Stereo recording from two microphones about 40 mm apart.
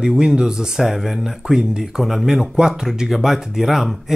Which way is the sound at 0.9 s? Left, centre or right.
Centre.